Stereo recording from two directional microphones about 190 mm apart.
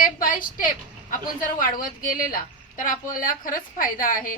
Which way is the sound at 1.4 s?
45° left (ahead or behind).